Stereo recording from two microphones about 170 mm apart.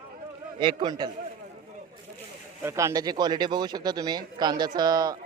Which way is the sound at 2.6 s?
15° right (ahead or behind).